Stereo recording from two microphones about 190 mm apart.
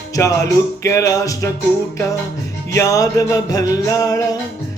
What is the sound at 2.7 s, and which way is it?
Music, 20° left (ahead or behind).